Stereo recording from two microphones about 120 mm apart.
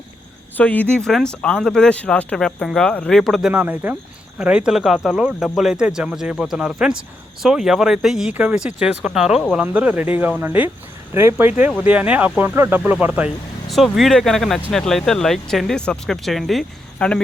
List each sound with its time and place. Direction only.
0.5 s speech: 15° left (ahead or behind)
3.5 s speech: 15° right (ahead or behind)
13.7 s speech: centre (ahead or behind)